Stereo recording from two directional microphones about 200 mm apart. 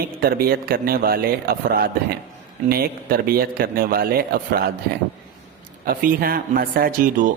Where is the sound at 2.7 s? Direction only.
50° right (ahead or behind).